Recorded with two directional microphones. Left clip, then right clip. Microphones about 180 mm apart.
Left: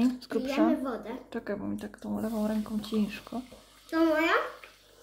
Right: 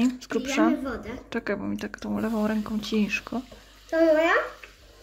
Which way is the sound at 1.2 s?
10° right (ahead or behind).